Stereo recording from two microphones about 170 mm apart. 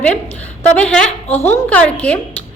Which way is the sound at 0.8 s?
5° left (ahead or behind).